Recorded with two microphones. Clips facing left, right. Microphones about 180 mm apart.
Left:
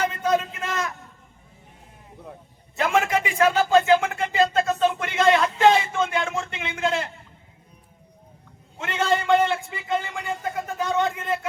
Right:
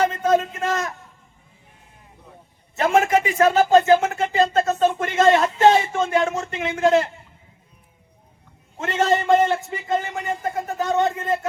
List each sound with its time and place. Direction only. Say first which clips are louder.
0.0 s a man's voice: right 4 dB; 40° right (ahead or behind)
2.7 s speech: right 4 dB; 40° right (ahead or behind)
8.8 s speech: right 3 dB; 40° right (ahead or behind)